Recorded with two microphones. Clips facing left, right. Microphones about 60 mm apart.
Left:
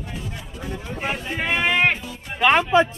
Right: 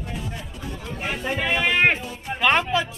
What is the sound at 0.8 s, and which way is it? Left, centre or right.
Speech, centre.